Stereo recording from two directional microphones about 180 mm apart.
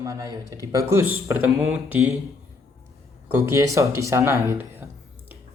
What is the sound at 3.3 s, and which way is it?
Speech, 15° right (ahead or behind).